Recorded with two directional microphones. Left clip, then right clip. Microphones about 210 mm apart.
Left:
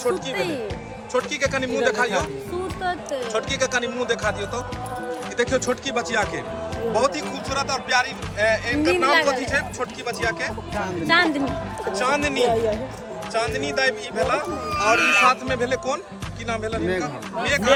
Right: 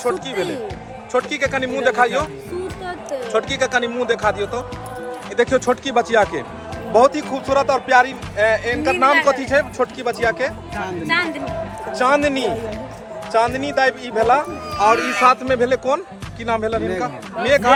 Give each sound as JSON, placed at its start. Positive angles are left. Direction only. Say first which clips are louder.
{"t": 1.1, "sound": "speech", "louder": "right 3 dB", "side_deg": 10}
{"t": 3.3, "sound": "speech", "louder": "right 6 dB", "side_deg": 5}
{"t": 11.0, "sound": "speech", "louder": "left 2 dB", "side_deg": 50}
{"t": 11.9, "sound": "speech", "louder": "right 6 dB", "side_deg": 0}